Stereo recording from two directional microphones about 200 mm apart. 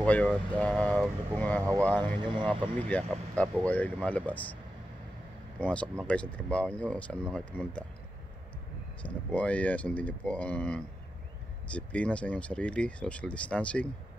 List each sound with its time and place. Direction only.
0.0 s speech: 5° left (ahead or behind)
2.1 s speech: 25° right (ahead or behind)
2.9 s speech: 5° left (ahead or behind)
5.6 s speech: 5° left (ahead or behind)
9.0 s speech: 5° left (ahead or behind)